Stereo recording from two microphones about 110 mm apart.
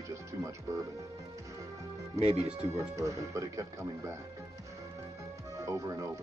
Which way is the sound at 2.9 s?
30° right (ahead or behind).